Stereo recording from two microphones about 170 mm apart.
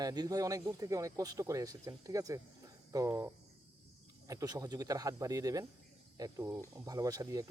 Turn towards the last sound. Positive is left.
turn(degrees=-20)  # may be behind; listen again after turning